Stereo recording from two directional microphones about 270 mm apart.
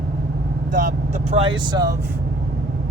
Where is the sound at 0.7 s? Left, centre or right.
Right.